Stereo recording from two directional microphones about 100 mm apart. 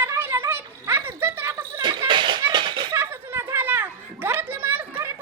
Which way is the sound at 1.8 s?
55° right (ahead or behind).